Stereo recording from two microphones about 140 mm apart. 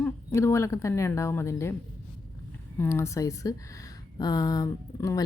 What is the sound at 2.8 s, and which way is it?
Speech, 20° left (ahead or behind).